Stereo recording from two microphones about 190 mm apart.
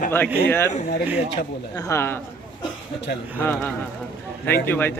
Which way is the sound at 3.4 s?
10° left (ahead or behind).